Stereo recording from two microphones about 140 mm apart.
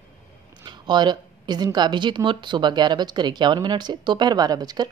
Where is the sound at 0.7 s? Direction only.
30° right (ahead or behind).